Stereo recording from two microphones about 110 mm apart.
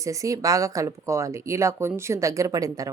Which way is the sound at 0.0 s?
30° right (ahead or behind).